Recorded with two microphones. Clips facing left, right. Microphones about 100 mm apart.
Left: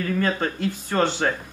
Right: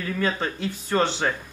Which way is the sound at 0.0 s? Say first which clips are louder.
Left 3 dB; centre (ahead or behind).